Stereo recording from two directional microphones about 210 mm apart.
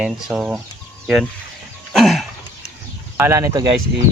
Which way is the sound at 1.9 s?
Centre (ahead or behind).